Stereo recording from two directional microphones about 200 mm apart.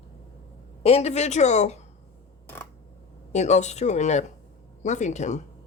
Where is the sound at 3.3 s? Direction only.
35° left (ahead or behind).